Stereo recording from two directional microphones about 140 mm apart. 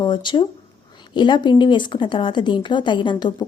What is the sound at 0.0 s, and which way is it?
A woman's voice, 35° left (ahead or behind).